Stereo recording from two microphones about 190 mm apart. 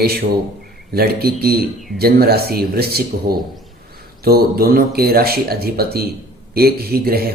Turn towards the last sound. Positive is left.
turn(degrees=-55)  # may be behind; listen again after turning